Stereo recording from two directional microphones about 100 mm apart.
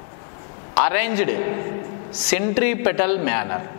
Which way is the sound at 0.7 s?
10° left (ahead or behind).